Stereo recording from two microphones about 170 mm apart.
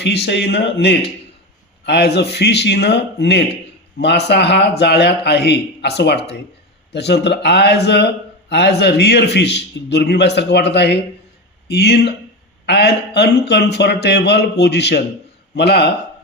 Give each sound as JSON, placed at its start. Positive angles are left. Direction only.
{"t": 0.0, "sound": "a man's voice", "side_deg": 85}
{"t": 1.8, "sound": "a man's voice", "side_deg": 75}